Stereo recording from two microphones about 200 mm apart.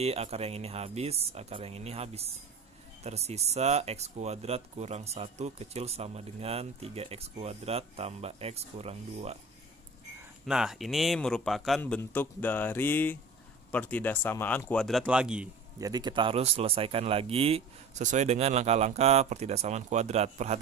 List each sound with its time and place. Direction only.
0.0 s speech: 30° right (ahead or behind)
10.4 s a man's voice: centre (ahead or behind)
15.8 s speech: 20° right (ahead or behind)